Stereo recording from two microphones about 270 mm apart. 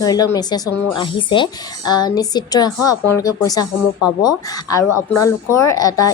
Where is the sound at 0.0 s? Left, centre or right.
Centre.